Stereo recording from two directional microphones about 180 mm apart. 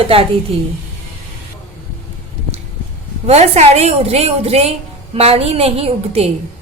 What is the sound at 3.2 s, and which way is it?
A woman's voice, 35° right (ahead or behind).